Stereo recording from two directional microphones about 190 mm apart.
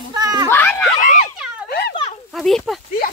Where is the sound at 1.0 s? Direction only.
40° left (ahead or behind).